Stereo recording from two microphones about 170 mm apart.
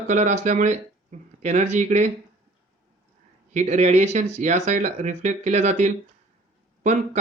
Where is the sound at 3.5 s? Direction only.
45° right (ahead or behind).